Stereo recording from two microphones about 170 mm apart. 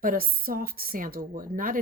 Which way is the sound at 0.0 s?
55° right (ahead or behind).